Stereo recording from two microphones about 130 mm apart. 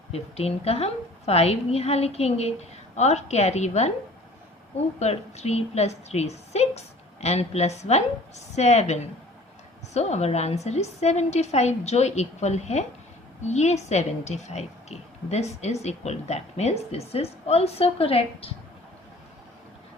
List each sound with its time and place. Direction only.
0.1 s a woman's voice: 50° left (ahead or behind)
4.9 s a woman's voice: 55° left (ahead or behind)